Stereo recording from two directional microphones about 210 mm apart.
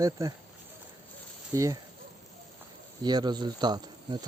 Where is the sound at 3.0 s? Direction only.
20° right (ahead or behind).